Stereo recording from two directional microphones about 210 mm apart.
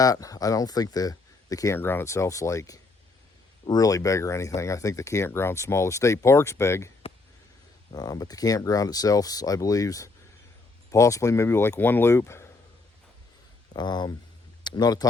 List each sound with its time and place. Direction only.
0.0 s speech: 15° left (ahead or behind)
7.9 s speech: 20° left (ahead or behind)
13.7 s speech: 20° left (ahead or behind)